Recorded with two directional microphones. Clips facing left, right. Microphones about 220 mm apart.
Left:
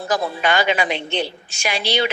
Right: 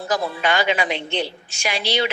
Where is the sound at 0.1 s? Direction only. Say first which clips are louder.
Left 2 dB; 50° left (ahead or behind).